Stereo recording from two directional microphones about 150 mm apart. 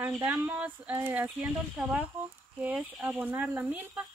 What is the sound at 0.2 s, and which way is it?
Speech, 10° right (ahead or behind).